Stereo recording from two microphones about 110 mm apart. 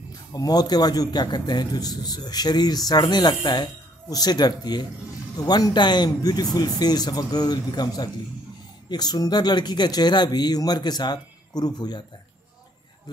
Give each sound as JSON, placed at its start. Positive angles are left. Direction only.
{"t": 0.3, "sound": "a man's voice", "side_deg": 35}